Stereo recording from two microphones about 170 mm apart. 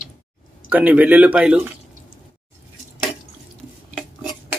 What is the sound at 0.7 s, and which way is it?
Speech, 10° right (ahead or behind).